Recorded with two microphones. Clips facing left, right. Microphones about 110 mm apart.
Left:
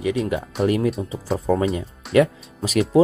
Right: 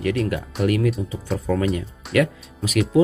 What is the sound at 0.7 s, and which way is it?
Speech, 30° left (ahead or behind).